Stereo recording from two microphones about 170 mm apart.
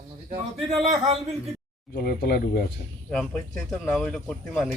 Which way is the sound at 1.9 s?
60° left (ahead or behind).